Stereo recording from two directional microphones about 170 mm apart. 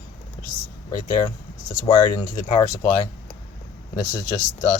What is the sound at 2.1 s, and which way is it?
Speech, 20° left (ahead or behind).